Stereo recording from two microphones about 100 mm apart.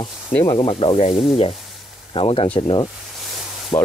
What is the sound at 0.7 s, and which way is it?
Speech, 75° left (ahead or behind).